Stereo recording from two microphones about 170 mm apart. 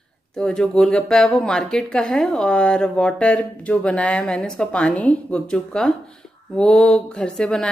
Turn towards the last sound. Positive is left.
turn(degrees=5)  # may be behind; listen again after turning